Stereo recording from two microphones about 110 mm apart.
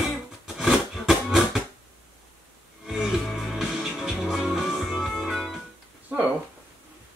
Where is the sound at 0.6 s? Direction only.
Centre (ahead or behind).